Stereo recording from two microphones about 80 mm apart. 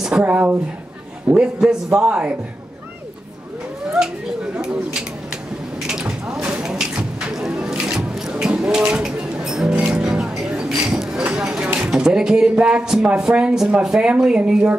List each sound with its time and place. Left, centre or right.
0.2 s speech: right
1.3 s a man's voice: centre
4.0 s a man's voice: centre
5.9 s a sound: centre
9.7 s a man's voice: centre